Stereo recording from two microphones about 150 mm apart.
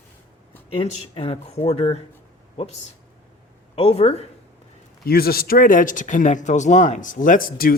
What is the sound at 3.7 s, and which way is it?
Speech, 40° left (ahead or behind).